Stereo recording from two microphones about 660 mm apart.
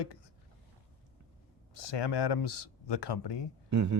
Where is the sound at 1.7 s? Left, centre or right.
Left.